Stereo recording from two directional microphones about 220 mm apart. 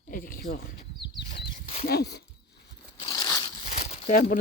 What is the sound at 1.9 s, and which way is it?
Speech, 45° left (ahead or behind).